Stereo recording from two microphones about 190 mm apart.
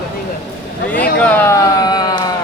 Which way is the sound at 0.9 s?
5° left (ahead or behind).